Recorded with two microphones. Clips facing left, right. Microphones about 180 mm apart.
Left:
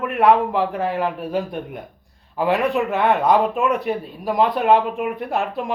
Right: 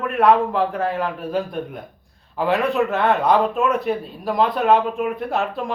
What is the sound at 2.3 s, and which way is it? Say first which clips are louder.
Speech: even; 5° left (ahead or behind).